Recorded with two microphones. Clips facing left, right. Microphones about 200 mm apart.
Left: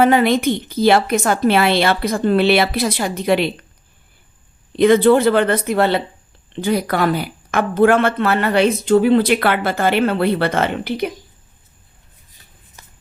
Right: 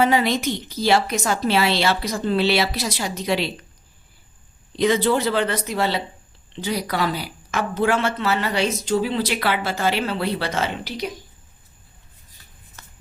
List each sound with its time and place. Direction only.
0.0 s a woman's voice: 55° left (ahead or behind)
4.8 s a woman's voice: 55° left (ahead or behind)
12.8 s a sound: 15° left (ahead or behind)